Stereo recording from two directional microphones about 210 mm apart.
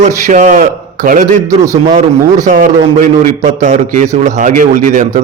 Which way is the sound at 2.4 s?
40° right (ahead or behind).